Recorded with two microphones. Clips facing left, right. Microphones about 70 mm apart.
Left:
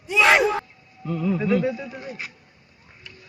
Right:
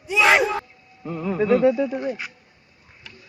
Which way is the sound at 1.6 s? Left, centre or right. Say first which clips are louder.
Right 8 dB; right.